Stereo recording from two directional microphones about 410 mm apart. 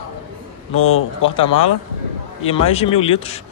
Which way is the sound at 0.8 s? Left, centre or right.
Left.